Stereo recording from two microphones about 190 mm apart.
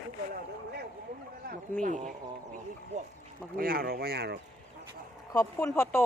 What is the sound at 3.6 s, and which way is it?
Speech, 50° right (ahead or behind).